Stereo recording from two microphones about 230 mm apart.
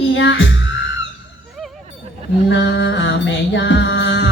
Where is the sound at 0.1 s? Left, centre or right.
Left.